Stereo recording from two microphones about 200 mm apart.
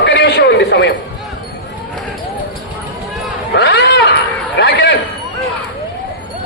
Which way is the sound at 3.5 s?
55° left (ahead or behind).